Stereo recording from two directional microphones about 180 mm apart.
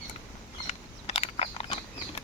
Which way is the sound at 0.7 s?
35° left (ahead or behind).